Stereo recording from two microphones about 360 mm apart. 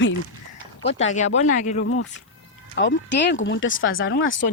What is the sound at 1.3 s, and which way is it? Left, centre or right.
Speech, centre.